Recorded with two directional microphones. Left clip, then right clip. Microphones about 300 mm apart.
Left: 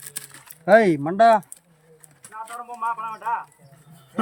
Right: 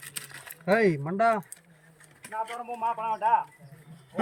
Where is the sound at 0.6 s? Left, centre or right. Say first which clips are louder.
Left 8 dB; left.